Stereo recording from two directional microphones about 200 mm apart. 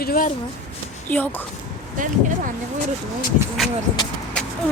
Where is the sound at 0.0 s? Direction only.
45° left (ahead or behind).